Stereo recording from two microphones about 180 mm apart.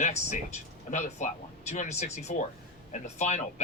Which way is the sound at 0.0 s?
40° left (ahead or behind).